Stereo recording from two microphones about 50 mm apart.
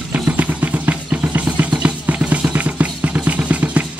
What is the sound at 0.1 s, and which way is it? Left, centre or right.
Music, right.